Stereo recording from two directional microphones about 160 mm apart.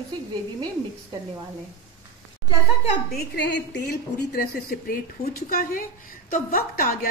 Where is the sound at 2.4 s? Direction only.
40° left (ahead or behind).